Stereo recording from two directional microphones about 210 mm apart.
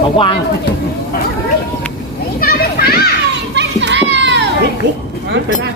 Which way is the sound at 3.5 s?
55° right (ahead or behind).